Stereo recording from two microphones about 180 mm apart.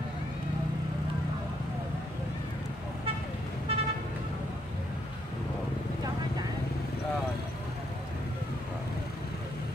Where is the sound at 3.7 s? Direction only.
30° right (ahead or behind).